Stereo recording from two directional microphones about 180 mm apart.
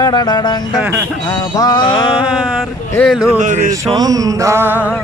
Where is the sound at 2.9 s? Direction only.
10° left (ahead or behind).